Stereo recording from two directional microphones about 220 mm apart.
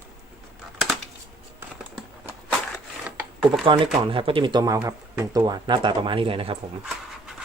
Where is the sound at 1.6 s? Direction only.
10° right (ahead or behind).